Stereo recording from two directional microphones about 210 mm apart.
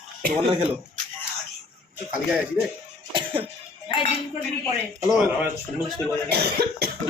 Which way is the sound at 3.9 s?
25° left (ahead or behind).